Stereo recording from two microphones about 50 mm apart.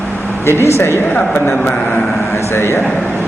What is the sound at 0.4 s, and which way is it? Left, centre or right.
Speech, left.